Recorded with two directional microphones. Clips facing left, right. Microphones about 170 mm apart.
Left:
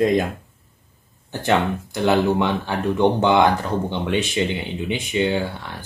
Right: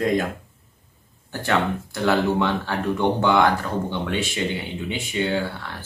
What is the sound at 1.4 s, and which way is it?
Speech, 20° left (ahead or behind).